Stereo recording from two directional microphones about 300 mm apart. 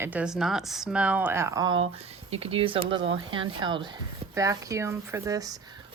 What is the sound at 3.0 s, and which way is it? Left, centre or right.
Speech, right.